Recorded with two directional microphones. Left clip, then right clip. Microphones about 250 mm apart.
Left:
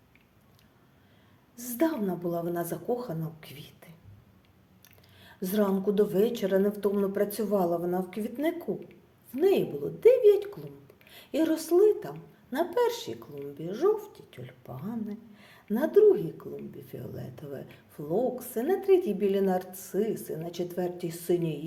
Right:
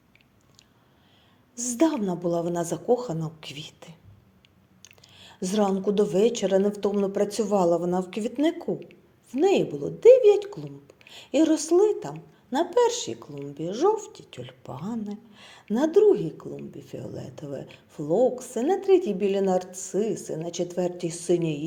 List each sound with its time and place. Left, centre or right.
1.5 s a woman's voice: centre